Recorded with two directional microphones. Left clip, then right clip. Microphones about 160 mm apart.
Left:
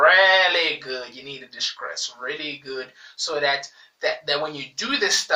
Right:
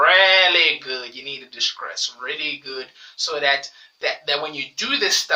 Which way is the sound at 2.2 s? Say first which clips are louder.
Right 3 dB; 20° right (ahead or behind).